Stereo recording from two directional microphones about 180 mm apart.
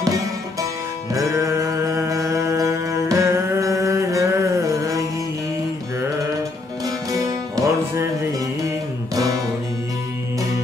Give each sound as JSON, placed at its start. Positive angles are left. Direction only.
{"t": 1.1, "sound": "music", "side_deg": -20}
{"t": 7.1, "sound": "music", "side_deg": -20}